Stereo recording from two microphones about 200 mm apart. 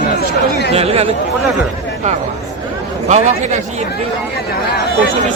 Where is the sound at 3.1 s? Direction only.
35° right (ahead or behind).